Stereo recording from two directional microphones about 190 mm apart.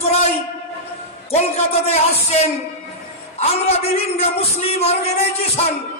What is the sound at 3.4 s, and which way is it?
Music, 35° left (ahead or behind).